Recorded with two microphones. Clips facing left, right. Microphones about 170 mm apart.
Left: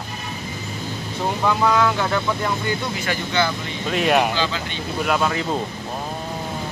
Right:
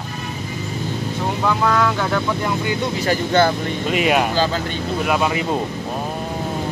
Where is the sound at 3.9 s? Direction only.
5° right (ahead or behind).